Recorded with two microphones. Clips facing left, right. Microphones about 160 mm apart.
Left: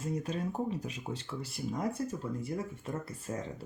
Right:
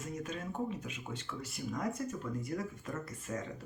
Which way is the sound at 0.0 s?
30° left (ahead or behind).